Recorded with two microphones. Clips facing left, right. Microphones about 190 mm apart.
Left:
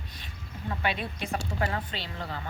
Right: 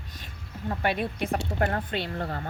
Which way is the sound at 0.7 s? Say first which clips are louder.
Right 4 dB; 50° right (ahead or behind).